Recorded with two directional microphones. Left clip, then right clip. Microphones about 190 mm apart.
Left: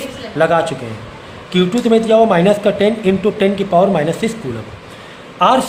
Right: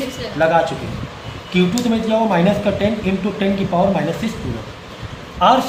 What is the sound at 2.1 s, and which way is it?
A man's voice, 55° left (ahead or behind).